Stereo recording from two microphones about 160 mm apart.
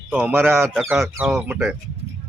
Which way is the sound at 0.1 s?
10° right (ahead or behind).